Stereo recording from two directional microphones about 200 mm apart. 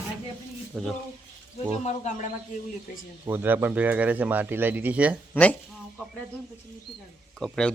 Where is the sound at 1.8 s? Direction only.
35° left (ahead or behind).